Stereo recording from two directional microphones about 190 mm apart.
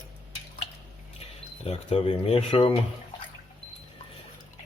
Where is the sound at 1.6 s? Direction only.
30° left (ahead or behind).